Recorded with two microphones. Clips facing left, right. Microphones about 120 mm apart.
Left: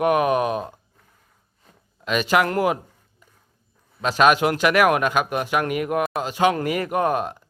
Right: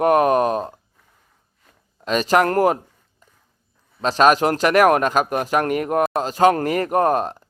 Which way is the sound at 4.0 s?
35° right (ahead or behind).